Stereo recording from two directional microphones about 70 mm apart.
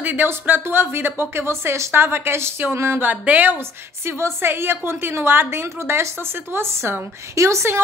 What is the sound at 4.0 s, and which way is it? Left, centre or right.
A woman's voice, right.